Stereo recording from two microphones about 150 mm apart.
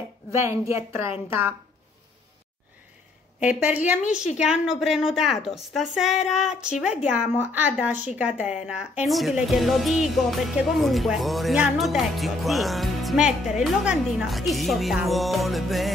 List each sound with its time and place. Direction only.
0.3 s a woman's voice: 20° right (ahead or behind)
3.3 s a woman's voice: 10° right (ahead or behind)